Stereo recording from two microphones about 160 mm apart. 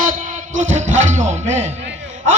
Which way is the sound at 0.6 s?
50° right (ahead or behind).